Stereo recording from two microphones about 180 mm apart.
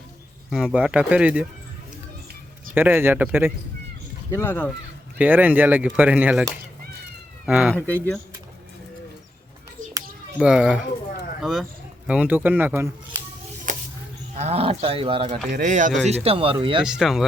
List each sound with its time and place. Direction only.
0.5 s speech: 5° right (ahead or behind)
2.7 s speech: 10° right (ahead or behind)
4.3 s speech: 15° left (ahead or behind)
5.1 s speech: 10° right (ahead or behind)
7.4 s speech: 5° right (ahead or behind)
7.8 s speech: 10° left (ahead or behind)
10.4 s speech: 5° right (ahead or behind)
13.7 s a sound: 45° right (ahead or behind)
14.3 s speech: 35° right (ahead or behind)
15.4 s speech: 45° right (ahead or behind)
16.0 s speech: 35° right (ahead or behind)
16.8 s speech: 5° right (ahead or behind)